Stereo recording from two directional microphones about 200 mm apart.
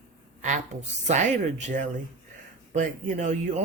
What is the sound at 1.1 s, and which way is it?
Speech, 35° right (ahead or behind).